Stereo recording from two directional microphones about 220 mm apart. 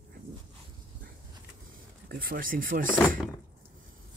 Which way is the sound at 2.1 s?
40° right (ahead or behind).